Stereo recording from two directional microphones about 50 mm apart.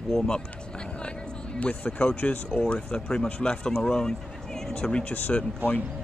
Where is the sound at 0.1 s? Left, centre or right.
Centre.